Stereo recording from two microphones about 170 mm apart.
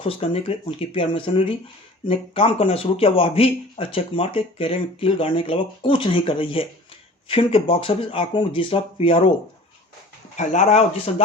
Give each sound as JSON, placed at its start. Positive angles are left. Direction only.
{"t": 0.0, "sound": "a man's voice", "side_deg": 35}
{"t": 10.3, "sound": "speech", "side_deg": 45}